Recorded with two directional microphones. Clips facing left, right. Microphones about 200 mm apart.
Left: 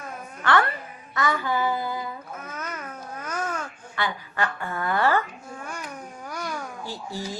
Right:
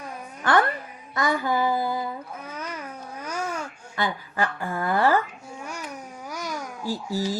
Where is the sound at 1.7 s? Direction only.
30° right (ahead or behind).